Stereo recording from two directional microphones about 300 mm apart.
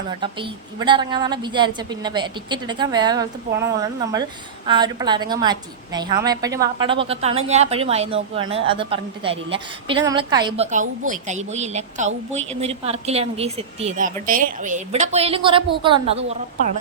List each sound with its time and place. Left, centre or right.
0.2 s a woman's voice: centre